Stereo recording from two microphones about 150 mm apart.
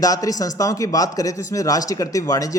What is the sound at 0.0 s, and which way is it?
Speech, 25° left (ahead or behind).